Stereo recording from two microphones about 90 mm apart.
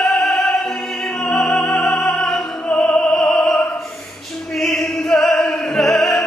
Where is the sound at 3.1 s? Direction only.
5° left (ahead or behind).